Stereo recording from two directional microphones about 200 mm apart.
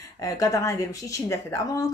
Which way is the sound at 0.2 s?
15° left (ahead or behind).